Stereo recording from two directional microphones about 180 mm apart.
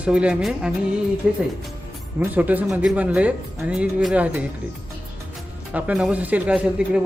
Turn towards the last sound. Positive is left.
turn(degrees=-5)  # may be behind; listen again after turning